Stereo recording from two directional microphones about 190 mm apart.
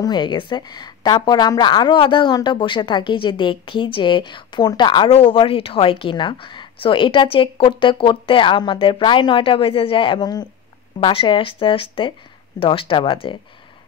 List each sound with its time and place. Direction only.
0.0 s a woman's voice: 25° left (ahead or behind)